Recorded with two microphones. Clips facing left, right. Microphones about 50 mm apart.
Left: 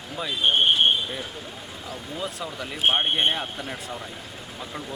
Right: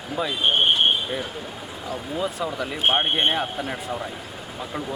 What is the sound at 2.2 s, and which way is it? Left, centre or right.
Speech, centre.